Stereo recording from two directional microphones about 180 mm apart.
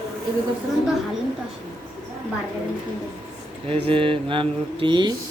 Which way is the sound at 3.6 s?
30° right (ahead or behind).